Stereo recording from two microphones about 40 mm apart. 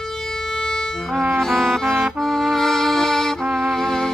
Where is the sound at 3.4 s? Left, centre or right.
Centre.